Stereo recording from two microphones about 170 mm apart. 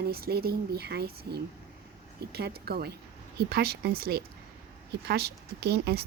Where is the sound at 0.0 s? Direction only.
65° right (ahead or behind).